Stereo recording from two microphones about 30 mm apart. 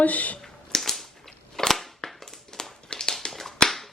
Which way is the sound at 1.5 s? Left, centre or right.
Centre.